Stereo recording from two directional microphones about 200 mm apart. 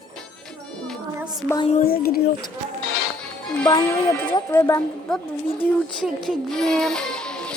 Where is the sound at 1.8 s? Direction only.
50° left (ahead or behind).